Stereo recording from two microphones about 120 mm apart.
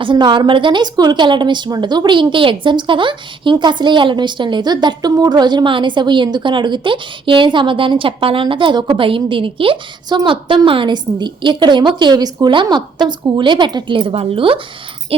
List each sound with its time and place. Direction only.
0.0 s a woman's voice: 40° right (ahead or behind)